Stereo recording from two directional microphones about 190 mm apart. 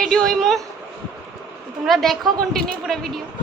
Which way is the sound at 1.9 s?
Centre (ahead or behind).